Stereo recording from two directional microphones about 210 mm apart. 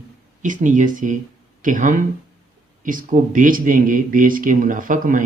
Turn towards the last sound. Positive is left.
turn(degrees=-40)  # may be behind; listen again after turning